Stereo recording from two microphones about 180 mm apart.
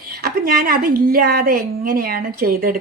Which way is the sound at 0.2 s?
55° right (ahead or behind).